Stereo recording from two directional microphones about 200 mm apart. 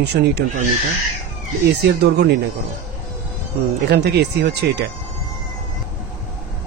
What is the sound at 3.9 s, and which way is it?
Speech, 55° right (ahead or behind).